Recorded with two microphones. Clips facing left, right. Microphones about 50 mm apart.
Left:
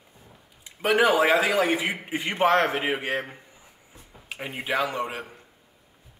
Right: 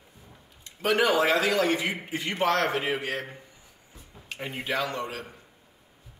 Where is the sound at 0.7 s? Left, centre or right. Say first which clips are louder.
Left 3 dB; centre.